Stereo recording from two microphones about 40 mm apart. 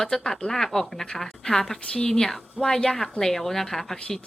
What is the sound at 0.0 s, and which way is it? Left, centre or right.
A woman's voice, centre.